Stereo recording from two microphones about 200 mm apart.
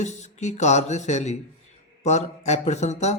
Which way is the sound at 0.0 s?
35° left (ahead or behind).